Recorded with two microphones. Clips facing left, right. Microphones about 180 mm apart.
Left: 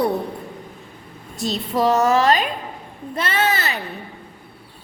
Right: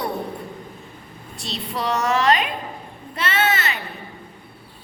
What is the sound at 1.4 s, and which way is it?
A woman's voice, 40° left (ahead or behind).